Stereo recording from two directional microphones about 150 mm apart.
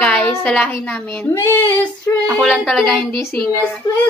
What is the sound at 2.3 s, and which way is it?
Speech, centre (ahead or behind).